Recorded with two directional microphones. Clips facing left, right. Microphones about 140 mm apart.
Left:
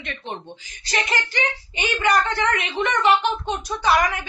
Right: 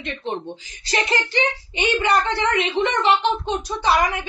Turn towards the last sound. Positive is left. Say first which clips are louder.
# even
turn(degrees=-25)  # may be behind; listen again after turning